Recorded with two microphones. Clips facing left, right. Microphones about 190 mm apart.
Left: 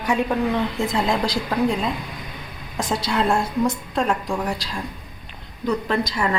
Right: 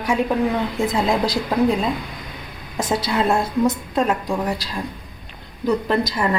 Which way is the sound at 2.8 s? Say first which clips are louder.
Right 2 dB; 5° right (ahead or behind).